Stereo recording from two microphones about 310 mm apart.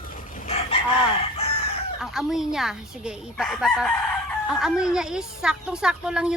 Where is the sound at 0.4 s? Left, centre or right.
Centre.